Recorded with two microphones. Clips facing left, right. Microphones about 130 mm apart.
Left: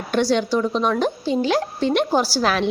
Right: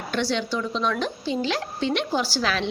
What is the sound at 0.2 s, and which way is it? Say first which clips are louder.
A woman's voice: left 7 dB; 45° left (ahead or behind).